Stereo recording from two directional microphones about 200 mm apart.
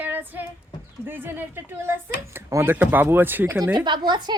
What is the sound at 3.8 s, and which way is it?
Speech, 25° right (ahead or behind).